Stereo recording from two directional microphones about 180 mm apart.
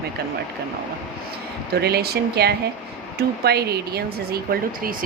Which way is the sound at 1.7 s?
60° right (ahead or behind).